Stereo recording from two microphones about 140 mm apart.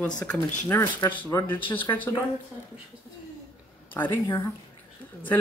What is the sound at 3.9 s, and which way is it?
Speech, 15° left (ahead or behind).